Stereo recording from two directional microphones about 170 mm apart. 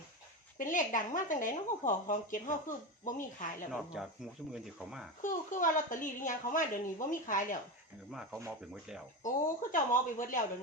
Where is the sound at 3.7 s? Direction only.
5° right (ahead or behind).